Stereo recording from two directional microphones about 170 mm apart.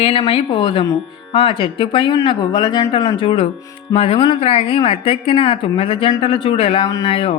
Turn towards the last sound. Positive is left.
turn(degrees=30)  # may be behind; listen again after turning